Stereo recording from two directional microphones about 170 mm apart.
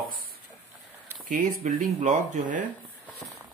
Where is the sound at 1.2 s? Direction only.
50° right (ahead or behind).